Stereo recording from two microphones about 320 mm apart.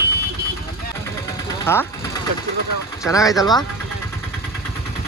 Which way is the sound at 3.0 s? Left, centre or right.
Centre.